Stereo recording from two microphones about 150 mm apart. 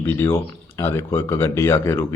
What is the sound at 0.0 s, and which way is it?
Speech, 15° left (ahead or behind).